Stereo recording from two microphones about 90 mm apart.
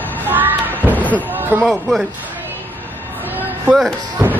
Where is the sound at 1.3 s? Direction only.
20° right (ahead or behind).